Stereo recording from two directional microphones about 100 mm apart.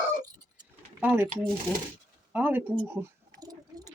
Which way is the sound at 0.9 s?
20° right (ahead or behind).